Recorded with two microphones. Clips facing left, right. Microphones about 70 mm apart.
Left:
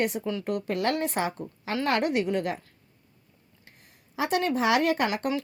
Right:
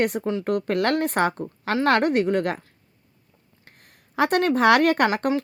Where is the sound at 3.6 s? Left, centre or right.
Right.